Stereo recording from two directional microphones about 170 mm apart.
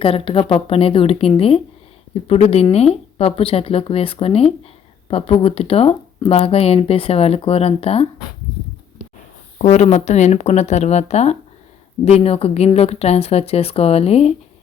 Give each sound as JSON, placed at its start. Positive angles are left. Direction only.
{"t": 0.0, "sound": "speech", "side_deg": 30}
{"t": 9.6, "sound": "speech", "side_deg": 40}